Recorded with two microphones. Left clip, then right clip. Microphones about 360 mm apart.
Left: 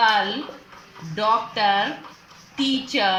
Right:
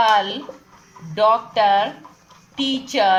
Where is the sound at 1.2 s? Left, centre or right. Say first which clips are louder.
Right 4 dB; right.